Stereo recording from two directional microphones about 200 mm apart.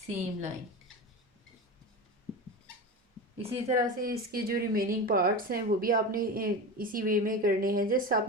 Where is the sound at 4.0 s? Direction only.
45° right (ahead or behind).